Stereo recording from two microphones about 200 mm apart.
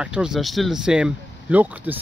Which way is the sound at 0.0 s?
5° right (ahead or behind).